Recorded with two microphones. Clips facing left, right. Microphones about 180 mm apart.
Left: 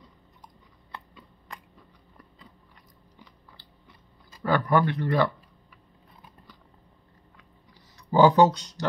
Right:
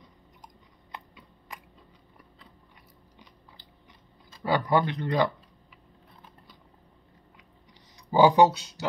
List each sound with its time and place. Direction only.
4.4 s speech: 15° right (ahead or behind)
8.1 s speech: 10° right (ahead or behind)